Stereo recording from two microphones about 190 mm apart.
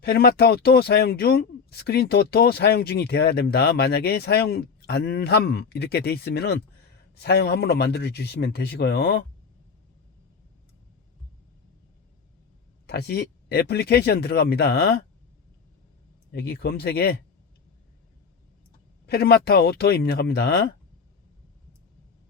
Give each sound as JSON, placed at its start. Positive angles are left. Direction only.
{"t": 0.0, "sound": "speech", "side_deg": 55}
{"t": 12.9, "sound": "speech", "side_deg": 60}
{"t": 16.3, "sound": "speech", "side_deg": 55}
{"t": 19.0, "sound": "speech", "side_deg": 55}